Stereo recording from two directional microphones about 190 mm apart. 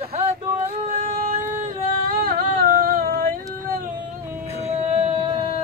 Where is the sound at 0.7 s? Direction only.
40° right (ahead or behind).